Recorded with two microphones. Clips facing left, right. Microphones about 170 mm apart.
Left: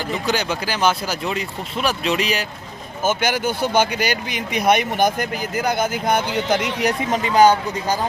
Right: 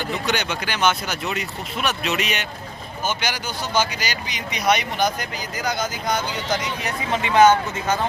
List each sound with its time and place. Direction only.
0.3 s speech: 35° left (ahead or behind)
3.0 s speech: 50° left (ahead or behind)
7.1 s speech: 35° left (ahead or behind)